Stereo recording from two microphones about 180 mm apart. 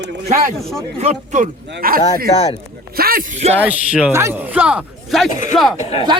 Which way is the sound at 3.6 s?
5° right (ahead or behind).